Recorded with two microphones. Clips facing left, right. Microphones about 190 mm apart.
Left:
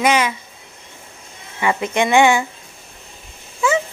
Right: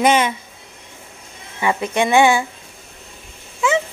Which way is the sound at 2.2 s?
10° right (ahead or behind).